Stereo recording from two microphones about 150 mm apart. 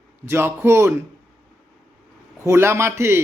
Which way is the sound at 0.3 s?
15° right (ahead or behind).